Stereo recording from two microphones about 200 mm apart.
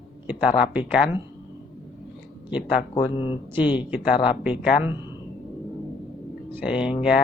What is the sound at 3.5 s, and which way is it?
Speech, 5° right (ahead or behind).